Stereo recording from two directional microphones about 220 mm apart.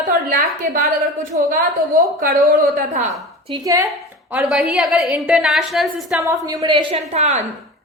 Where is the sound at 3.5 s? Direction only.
15° right (ahead or behind).